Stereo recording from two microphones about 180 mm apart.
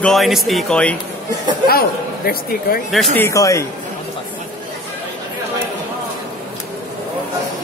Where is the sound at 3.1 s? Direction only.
15° left (ahead or behind).